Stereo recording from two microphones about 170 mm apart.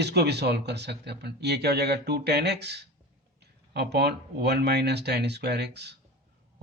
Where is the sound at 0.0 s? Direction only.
75° right (ahead or behind).